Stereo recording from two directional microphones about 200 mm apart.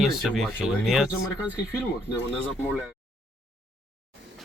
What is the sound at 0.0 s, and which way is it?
Speech, centre (ahead or behind).